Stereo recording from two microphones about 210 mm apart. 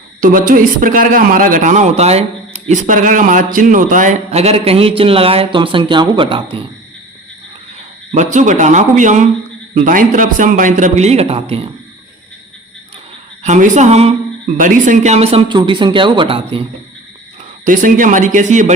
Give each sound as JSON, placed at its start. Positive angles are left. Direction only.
{"t": 0.2, "sound": "a man's voice", "side_deg": -40}
{"t": 8.1, "sound": "a man's voice", "side_deg": -35}
{"t": 13.4, "sound": "a woman's voice", "side_deg": -35}
{"t": 17.7, "sound": "a man's voice", "side_deg": -40}